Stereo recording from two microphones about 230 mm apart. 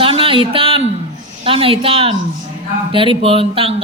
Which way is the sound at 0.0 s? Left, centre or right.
Right.